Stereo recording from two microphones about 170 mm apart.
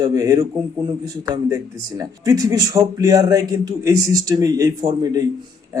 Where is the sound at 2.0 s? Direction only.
20° right (ahead or behind).